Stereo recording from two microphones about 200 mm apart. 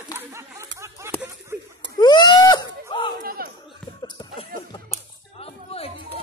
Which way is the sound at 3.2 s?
45° right (ahead or behind).